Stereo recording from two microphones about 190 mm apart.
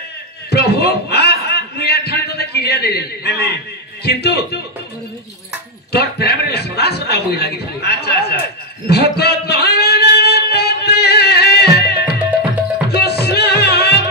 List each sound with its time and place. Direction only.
0.5 s chuckle: 55° left (ahead or behind)
4.0 s a man's voice: 55° left (ahead or behind)
5.9 s a sound: 60° left (ahead or behind)
12.8 s music: 55° left (ahead or behind)